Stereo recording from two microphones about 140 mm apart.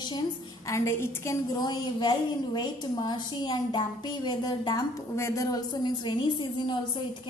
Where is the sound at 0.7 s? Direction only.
20° left (ahead or behind).